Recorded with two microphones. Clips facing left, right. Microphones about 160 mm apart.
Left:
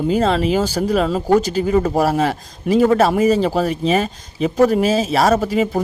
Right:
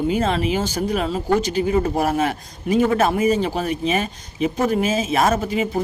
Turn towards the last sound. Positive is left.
turn(degrees=40)  # may be behind; listen again after turning